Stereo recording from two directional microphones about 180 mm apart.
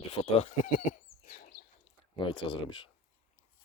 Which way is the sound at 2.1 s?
30° left (ahead or behind).